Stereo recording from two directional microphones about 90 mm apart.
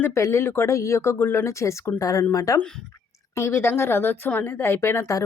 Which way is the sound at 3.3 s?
30° left (ahead or behind).